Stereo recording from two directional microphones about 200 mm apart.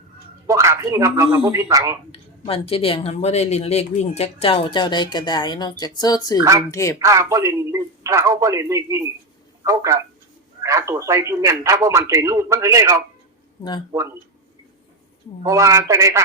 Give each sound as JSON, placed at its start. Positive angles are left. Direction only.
{"t": 0.4, "sound": "a man's voice", "side_deg": -15}
{"t": 2.1, "sound": "a woman's voice", "side_deg": 30}
{"t": 7.0, "sound": "a man's voice", "side_deg": -15}
{"t": 15.4, "sound": "a man's voice", "side_deg": -15}